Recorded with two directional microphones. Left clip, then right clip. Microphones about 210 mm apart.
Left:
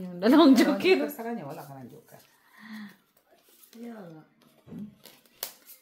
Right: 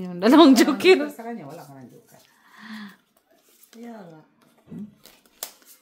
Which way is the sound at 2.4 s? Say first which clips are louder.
Right 5 dB; 35° right (ahead or behind).